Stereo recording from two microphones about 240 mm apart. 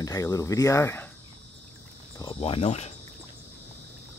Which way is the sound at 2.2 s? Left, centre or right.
Left.